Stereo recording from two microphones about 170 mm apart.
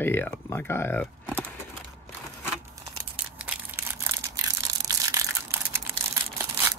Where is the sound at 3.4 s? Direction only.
10° right (ahead or behind).